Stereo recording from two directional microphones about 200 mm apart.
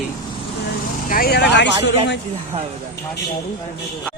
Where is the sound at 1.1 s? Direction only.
50° left (ahead or behind).